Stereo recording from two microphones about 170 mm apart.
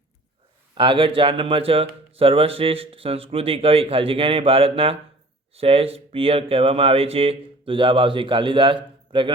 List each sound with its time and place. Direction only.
0.8 s speech: 30° right (ahead or behind)